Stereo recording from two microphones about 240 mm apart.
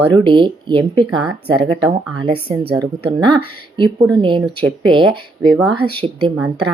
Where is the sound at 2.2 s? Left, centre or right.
Right.